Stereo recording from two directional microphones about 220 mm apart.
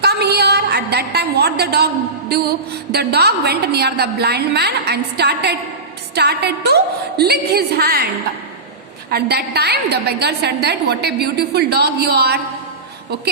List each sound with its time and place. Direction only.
0.0 s a sound: 50° right (ahead or behind)
2.9 s a woman's voice: 45° right (ahead or behind)
9.0 s a woman's voice: 45° right (ahead or behind)